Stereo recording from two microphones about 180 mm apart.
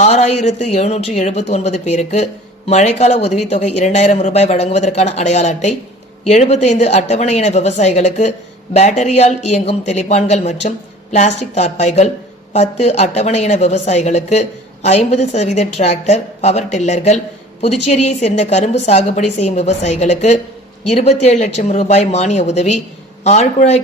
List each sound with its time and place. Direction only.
0.0 s a woman's voice: 40° left (ahead or behind)